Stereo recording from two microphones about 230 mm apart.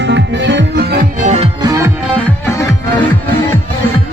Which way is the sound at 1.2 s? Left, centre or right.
Right.